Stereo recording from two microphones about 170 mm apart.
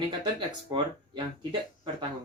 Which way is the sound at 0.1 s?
25° right (ahead or behind).